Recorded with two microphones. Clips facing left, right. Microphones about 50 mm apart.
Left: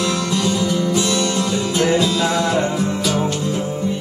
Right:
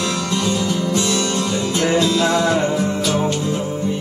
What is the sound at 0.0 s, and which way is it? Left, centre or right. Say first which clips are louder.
Music: left 1 dB; centre.